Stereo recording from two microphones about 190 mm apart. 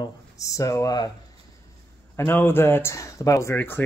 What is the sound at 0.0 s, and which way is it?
Speech, 15° left (ahead or behind).